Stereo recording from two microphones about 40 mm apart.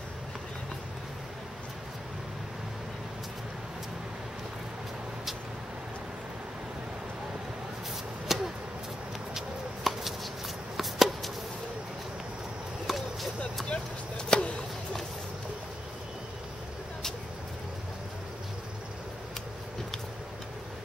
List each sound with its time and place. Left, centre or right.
8.3 s vehicle: centre
9.9 s chopping: centre
10.8 s a sound: centre
12.8 s chop: centre
13.7 s chop: left